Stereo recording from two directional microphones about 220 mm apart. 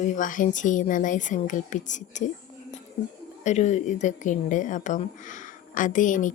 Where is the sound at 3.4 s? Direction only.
30° left (ahead or behind).